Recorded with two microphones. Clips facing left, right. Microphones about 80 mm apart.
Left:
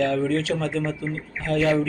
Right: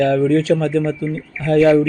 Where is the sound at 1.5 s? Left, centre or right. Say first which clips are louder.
Right 9 dB; right.